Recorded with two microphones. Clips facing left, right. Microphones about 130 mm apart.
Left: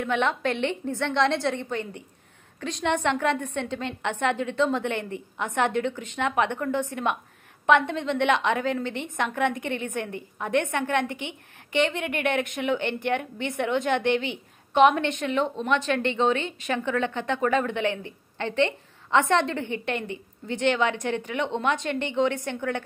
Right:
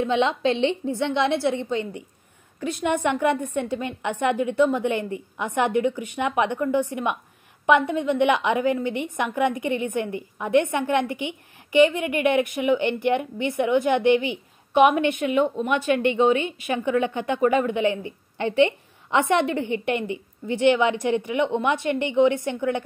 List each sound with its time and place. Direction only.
0.0 s a woman's voice: 15° right (ahead or behind)